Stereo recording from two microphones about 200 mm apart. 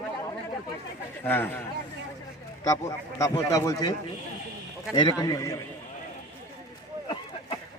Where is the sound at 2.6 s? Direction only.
15° left (ahead or behind).